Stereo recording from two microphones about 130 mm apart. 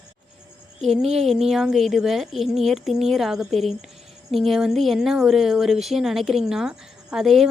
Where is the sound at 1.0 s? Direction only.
55° right (ahead or behind).